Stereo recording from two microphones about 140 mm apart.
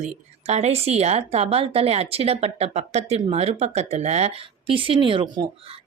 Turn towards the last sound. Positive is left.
turn(degrees=-40)  # may be behind; listen again after turning